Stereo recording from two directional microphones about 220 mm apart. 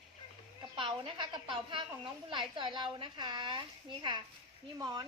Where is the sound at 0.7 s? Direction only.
25° right (ahead or behind).